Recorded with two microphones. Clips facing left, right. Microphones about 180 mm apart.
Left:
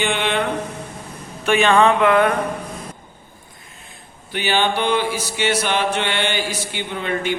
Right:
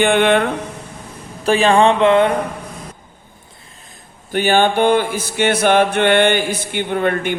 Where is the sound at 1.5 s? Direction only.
35° right (ahead or behind).